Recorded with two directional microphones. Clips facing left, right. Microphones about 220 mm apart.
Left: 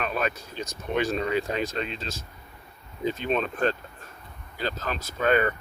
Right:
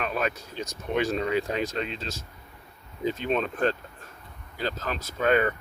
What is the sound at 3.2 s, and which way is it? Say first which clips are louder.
Speech: even; 10° right (ahead or behind).